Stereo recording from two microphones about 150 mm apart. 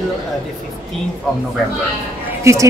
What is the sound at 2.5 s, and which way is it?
Speech, 20° right (ahead or behind).